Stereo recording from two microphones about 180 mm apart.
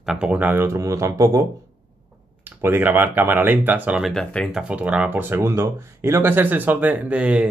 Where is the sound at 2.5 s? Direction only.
15° right (ahead or behind).